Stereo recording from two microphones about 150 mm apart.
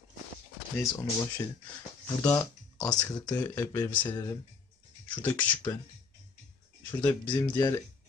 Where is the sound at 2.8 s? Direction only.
25° left (ahead or behind).